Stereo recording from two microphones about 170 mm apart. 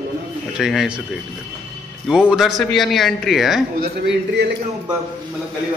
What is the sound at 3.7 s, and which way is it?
Speech, 90° right.